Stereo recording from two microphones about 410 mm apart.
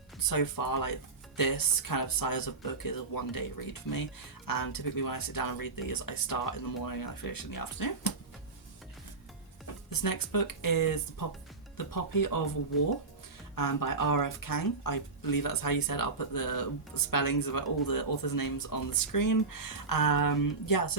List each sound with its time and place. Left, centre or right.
0.2 s speech: left
9.9 s speech: left
13.6 s speech: left